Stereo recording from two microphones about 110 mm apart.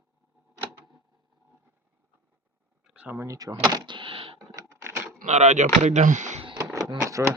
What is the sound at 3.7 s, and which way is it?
Power windows, 40° right (ahead or behind).